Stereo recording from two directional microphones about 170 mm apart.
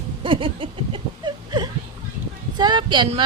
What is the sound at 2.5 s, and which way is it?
Speech, 25° right (ahead or behind).